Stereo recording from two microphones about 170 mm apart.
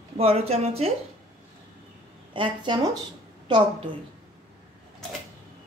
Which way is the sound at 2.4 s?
25° right (ahead or behind).